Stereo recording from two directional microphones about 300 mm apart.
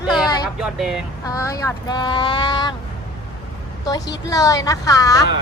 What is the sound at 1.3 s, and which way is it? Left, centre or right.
A woman's voice, centre.